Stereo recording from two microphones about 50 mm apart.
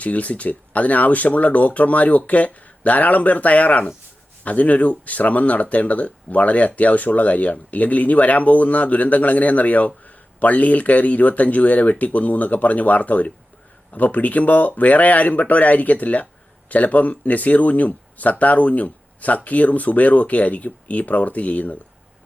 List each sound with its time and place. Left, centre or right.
0.0 s speech: left